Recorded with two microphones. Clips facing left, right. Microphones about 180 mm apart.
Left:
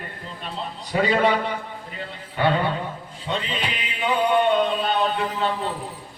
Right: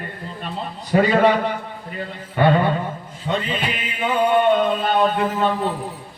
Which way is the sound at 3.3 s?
50° right (ahead or behind).